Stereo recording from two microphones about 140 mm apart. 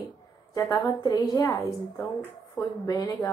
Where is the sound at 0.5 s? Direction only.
30° left (ahead or behind).